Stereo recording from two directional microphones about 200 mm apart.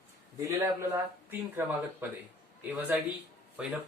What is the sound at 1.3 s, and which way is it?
Speech, 10° right (ahead or behind).